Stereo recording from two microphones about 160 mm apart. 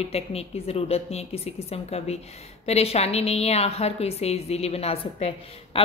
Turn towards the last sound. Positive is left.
turn(degrees=40)  # may be behind; listen again after turning